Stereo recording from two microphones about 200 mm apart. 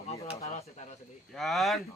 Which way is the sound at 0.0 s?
30° left (ahead or behind).